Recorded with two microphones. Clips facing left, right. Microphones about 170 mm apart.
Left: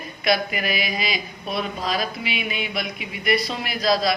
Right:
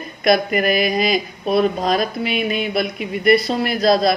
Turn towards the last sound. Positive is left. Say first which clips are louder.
# right 6 dB
turn(degrees=-40)  # may be behind; listen again after turning